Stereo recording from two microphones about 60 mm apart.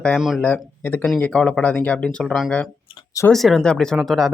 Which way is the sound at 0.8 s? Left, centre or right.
Left.